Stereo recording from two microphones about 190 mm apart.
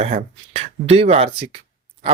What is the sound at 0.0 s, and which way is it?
Speech, 35° right (ahead or behind).